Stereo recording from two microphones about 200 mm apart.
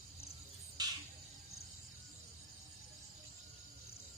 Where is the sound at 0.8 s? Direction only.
20° right (ahead or behind).